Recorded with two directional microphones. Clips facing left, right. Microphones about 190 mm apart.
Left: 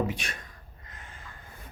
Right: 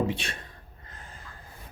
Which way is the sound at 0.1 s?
30° right (ahead or behind).